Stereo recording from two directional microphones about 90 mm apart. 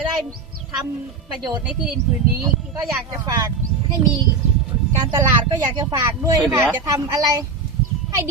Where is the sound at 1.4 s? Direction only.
55° right (ahead or behind).